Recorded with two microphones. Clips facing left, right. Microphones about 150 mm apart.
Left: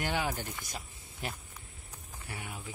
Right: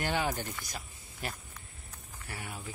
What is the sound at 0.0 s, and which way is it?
Speech, 10° left (ahead or behind).